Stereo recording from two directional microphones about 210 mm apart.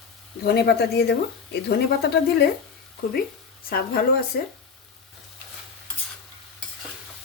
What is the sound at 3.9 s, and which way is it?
Speech, 45° left (ahead or behind).